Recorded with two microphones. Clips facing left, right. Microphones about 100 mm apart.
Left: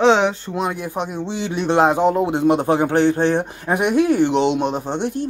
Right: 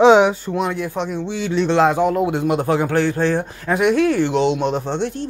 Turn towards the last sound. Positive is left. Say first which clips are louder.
# even
turn(degrees=15)  # may be behind; listen again after turning